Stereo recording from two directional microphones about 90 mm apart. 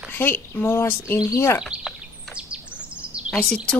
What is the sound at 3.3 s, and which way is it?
Speech, centre (ahead or behind).